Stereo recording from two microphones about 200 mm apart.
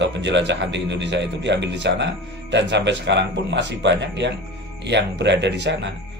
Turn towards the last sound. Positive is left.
turn(degrees=-60)  # may be behind; listen again after turning